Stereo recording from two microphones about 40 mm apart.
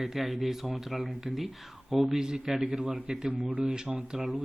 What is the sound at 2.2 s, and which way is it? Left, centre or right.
Speech, centre.